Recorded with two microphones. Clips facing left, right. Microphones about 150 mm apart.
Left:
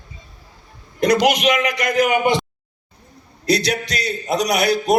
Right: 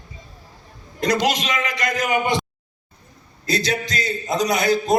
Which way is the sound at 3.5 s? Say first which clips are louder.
Left 4 dB; 70° left (ahead or behind).